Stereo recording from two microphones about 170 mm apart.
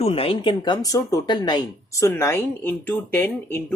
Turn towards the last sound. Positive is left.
turn(degrees=10)  # may be behind; listen again after turning